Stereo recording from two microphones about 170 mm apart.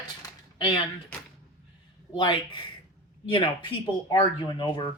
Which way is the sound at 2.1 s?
30° left (ahead or behind).